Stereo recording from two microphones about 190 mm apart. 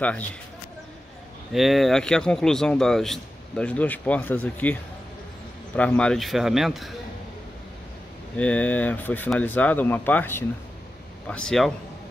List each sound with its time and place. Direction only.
0.0 s speech: 5° left (ahead or behind)
1.5 s speech: centre (ahead or behind)
5.8 s speech: 5° left (ahead or behind)
8.4 s speech: 5° left (ahead or behind)